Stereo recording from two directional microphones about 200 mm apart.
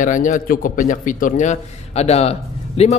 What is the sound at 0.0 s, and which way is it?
A man's voice, 40° left (ahead or behind).